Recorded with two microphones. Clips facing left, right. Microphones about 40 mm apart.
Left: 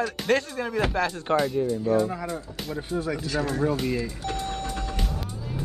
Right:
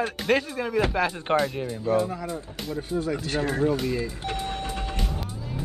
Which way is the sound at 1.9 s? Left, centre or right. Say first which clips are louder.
Right 1 dB; right.